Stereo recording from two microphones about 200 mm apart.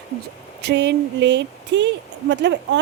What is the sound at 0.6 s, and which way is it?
Speech, 60° right (ahead or behind).